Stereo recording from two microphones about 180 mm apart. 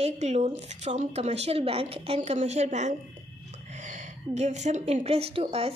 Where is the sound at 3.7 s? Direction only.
40° right (ahead or behind).